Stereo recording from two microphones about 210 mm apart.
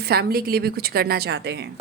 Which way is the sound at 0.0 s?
50° right (ahead or behind).